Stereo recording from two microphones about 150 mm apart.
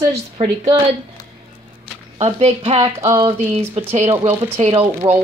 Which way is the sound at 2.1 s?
45° right (ahead or behind).